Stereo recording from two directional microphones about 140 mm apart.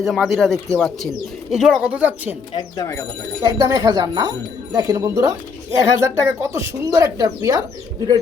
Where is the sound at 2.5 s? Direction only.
30° left (ahead or behind).